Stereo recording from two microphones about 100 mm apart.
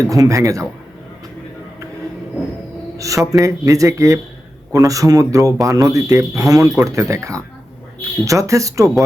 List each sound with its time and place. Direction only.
0.0 s speech: 35° right (ahead or behind)
3.0 s speech: 35° right (ahead or behind)